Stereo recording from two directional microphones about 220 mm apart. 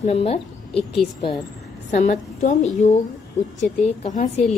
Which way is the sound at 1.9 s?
30° left (ahead or behind).